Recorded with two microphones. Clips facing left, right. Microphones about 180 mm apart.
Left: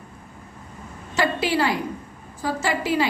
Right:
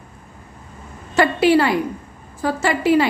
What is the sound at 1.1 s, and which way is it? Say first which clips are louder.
A woman's voice: right 8 dB; 60° right (ahead or behind).